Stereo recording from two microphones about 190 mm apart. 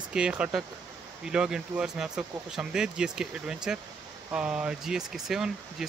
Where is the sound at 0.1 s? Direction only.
5° right (ahead or behind).